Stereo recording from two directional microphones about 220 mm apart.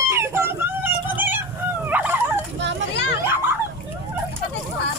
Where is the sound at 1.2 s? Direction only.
10° right (ahead or behind).